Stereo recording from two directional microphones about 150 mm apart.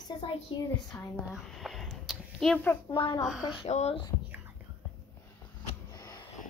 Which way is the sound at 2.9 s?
35° left (ahead or behind).